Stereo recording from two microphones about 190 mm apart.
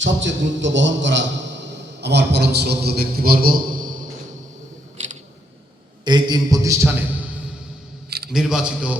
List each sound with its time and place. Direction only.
0.0 s a man's voice: 75° right (ahead or behind); by 3.9 s 45° right (ahead or behind)
6.1 s a man's voice: 20° right (ahead or behind); by 9.0 s 5° right (ahead or behind)